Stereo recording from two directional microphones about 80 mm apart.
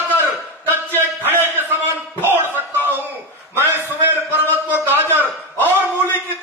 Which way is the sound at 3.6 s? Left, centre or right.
Right.